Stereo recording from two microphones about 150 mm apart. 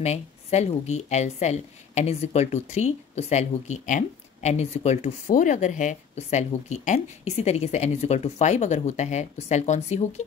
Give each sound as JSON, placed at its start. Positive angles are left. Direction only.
{"t": 0.0, "sound": "speech", "side_deg": 50}